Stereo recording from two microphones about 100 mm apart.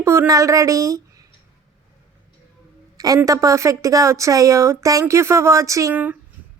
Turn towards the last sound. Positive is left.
turn(degrees=-15)  # may be behind; listen again after turning